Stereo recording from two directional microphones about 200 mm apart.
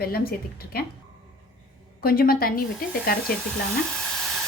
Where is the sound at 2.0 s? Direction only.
50° left (ahead or behind).